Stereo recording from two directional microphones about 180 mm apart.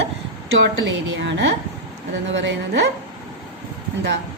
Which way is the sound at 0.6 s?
80° right.